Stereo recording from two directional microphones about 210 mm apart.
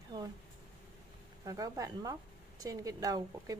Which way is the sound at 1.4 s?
15° right (ahead or behind).